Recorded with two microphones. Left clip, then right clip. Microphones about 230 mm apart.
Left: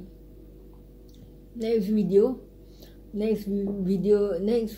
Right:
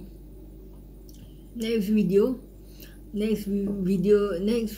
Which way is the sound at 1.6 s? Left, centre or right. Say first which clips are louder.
Left 1 dB; left.